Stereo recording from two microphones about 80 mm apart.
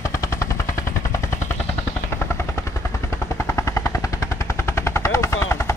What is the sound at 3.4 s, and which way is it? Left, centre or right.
Helicopter, left.